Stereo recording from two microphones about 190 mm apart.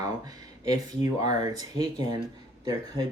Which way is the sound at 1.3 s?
20° right (ahead or behind).